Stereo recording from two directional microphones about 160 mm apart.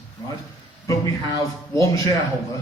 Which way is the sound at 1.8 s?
20° left (ahead or behind).